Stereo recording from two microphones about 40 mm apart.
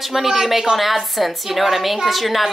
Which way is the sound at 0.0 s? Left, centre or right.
Centre.